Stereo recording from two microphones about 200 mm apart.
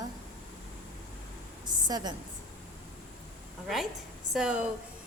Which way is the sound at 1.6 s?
20° right (ahead or behind).